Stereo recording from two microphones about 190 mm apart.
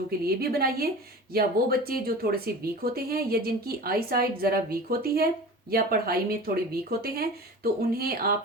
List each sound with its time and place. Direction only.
0.3 s speech: 55° right (ahead or behind)